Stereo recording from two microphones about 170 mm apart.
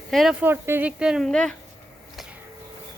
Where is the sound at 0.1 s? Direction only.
Centre (ahead or behind).